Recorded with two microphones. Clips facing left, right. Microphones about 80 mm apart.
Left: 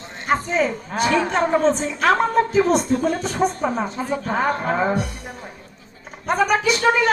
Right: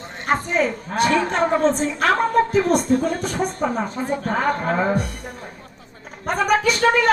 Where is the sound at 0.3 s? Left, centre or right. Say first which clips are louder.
Even; right.